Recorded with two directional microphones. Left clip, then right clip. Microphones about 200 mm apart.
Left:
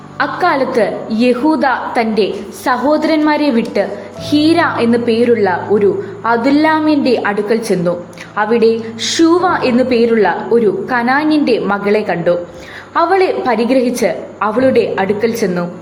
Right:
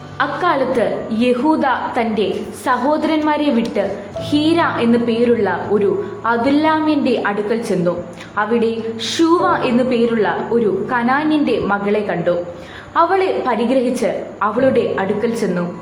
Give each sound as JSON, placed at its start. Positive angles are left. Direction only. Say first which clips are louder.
{"t": 0.2, "sound": "a woman's voice", "louder": "left 3 dB", "side_deg": 30}